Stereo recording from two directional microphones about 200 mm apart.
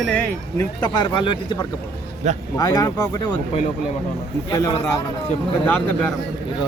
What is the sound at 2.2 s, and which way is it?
Speech, 35° right (ahead or behind).